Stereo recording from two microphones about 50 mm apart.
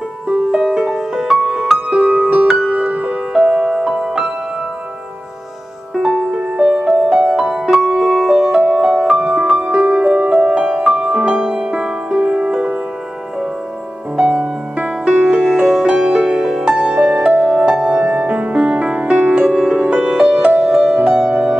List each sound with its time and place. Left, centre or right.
0.3 s music: centre
6.0 s music: centre
11.1 s music: right
14.1 s music: right
15.2 s music: centre
20.0 s music: centre